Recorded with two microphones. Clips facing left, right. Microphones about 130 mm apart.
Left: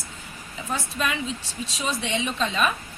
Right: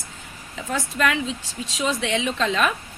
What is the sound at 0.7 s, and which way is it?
Speech, 90° right.